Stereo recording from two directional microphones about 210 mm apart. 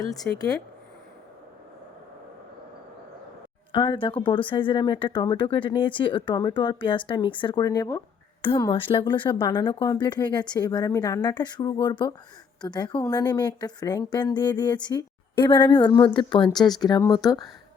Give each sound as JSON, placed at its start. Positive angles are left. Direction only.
{"t": 0.3, "sound": "speech", "side_deg": 20}
{"t": 3.7, "sound": "speech", "side_deg": 25}